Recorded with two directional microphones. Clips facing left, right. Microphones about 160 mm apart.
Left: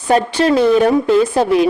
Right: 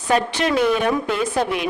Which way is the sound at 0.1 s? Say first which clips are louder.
Left 6 dB; 30° left (ahead or behind).